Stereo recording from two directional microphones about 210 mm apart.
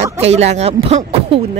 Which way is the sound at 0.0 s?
30° right (ahead or behind).